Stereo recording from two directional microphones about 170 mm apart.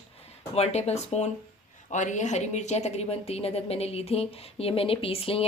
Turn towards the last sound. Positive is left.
turn(degrees=35)  # may be behind; listen again after turning